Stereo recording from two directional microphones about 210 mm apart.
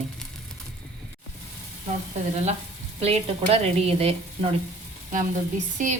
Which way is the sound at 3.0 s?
30° right (ahead or behind).